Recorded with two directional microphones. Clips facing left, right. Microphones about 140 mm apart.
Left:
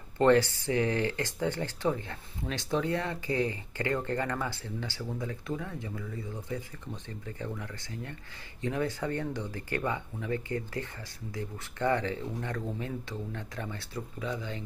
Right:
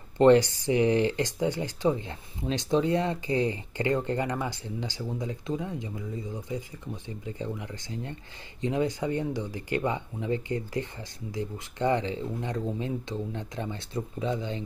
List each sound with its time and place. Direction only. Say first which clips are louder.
0.2 s speech: right 4 dB; 20° right (ahead or behind)